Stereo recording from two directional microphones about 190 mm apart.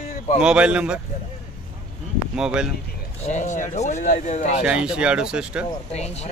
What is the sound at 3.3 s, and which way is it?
Speech, 40° left (ahead or behind).